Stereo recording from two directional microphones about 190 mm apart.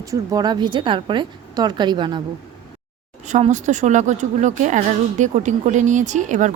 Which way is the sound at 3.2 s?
40° right (ahead or behind).